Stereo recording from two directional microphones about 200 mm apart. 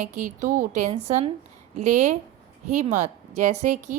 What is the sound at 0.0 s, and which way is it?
A woman's voice, 35° right (ahead or behind).